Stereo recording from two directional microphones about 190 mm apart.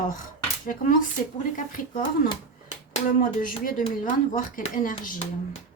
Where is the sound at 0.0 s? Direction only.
45° left (ahead or behind).